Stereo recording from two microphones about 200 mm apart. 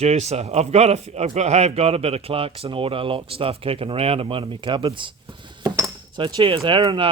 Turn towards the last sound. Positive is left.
turn(degrees=-20)  # may be behind; listen again after turning